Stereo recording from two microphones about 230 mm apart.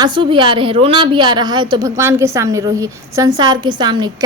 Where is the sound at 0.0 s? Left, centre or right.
Right.